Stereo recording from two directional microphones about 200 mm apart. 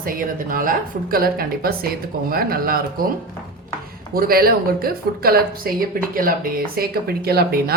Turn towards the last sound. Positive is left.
turn(degrees=-50)  # may be behind; listen again after turning